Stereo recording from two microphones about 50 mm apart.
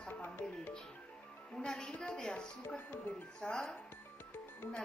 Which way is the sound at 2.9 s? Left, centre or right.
Left.